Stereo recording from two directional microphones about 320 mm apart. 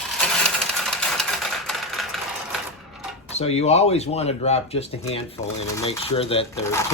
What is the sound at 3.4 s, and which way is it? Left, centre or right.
Speech, centre.